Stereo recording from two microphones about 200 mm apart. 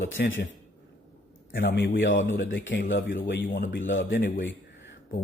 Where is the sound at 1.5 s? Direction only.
55° left (ahead or behind).